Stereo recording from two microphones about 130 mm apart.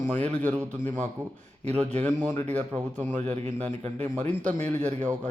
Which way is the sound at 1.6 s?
60° right (ahead or behind).